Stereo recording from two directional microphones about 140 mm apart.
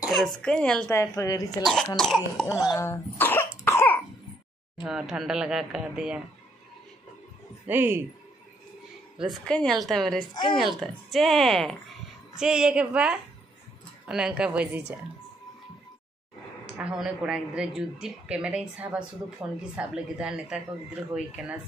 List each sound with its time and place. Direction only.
0.0 s a woman's voice: centre (ahead or behind)
0.9 s a woman's voice: 25° left (ahead or behind)
1.6 s speech: centre (ahead or behind)
2.6 s cough: 25° left (ahead or behind)
4.8 s speech: 5° right (ahead or behind)
7.6 s speech: 15° right (ahead or behind)
9.2 s speech: 5° left (ahead or behind)
10.3 s speech: 30° left (ahead or behind)
10.8 s speech: centre (ahead or behind)
16.6 s speech: 5° right (ahead or behind)